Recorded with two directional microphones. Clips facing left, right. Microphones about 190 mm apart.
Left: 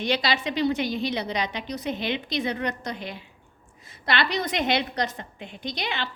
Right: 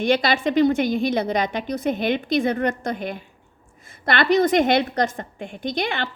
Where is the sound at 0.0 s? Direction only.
50° right (ahead or behind).